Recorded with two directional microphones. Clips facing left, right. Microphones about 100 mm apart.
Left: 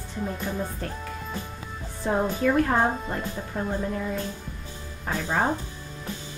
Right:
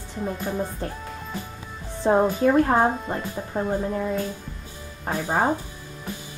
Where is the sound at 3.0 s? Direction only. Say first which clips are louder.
Right 2 dB; 5° right (ahead or behind).